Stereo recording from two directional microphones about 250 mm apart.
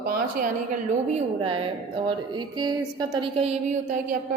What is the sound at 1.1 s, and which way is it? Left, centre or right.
A woman's voice, right.